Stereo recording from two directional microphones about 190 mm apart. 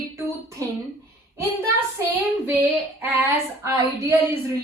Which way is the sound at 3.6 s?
15° right (ahead or behind).